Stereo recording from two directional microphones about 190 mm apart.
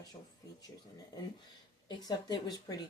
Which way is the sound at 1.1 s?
20° left (ahead or behind).